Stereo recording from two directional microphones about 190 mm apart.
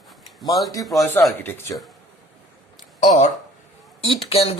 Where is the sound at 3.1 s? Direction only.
40° left (ahead or behind).